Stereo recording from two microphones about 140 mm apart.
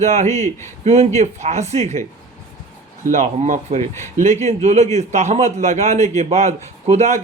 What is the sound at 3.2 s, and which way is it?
A man's voice, 55° right (ahead or behind).